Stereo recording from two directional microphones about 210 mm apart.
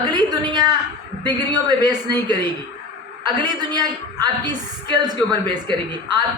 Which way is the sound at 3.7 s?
20° right (ahead or behind).